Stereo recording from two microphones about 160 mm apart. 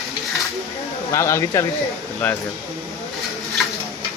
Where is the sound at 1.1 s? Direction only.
15° left (ahead or behind).